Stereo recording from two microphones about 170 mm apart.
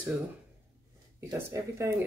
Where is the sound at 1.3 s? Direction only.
15° right (ahead or behind).